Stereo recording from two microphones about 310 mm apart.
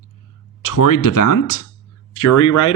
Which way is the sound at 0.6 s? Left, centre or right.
Left.